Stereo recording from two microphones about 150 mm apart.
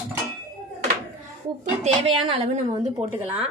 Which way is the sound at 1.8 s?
35° right (ahead or behind).